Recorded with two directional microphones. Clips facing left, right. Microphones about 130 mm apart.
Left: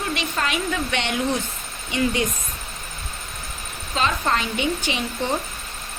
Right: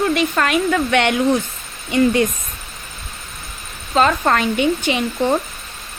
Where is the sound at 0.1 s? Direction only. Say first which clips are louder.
Right 8 dB; 55° right (ahead or behind).